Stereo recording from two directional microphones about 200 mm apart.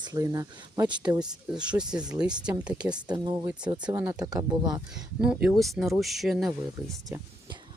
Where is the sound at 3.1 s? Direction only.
15° right (ahead or behind).